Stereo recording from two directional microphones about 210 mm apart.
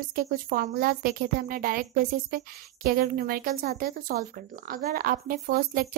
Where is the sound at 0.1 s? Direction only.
40° right (ahead or behind).